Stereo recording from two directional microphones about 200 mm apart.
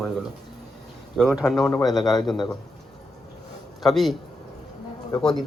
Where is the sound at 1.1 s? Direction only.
Centre (ahead or behind).